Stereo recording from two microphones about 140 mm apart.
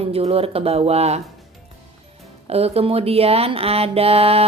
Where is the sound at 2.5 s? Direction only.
45° right (ahead or behind).